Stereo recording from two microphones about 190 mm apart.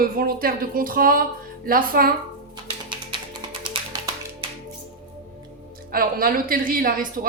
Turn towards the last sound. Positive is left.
turn(degrees=-45)  # may be behind; listen again after turning